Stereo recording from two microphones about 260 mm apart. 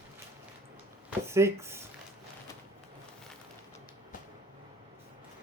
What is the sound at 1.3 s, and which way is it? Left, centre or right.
Speech, centre.